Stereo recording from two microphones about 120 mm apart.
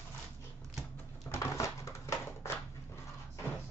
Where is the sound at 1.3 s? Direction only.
25° left (ahead or behind).